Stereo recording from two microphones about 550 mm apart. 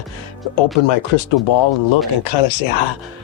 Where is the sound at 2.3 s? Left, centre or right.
Left.